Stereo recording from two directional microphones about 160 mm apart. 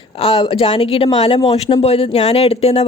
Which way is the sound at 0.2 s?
40° left (ahead or behind).